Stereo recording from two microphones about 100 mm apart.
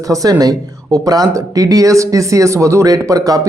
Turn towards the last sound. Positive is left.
turn(degrees=-35)  # may be behind; listen again after turning